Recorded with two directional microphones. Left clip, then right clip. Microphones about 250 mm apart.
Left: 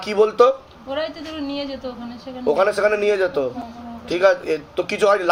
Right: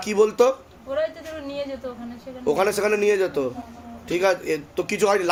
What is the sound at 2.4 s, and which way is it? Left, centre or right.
Speech, right.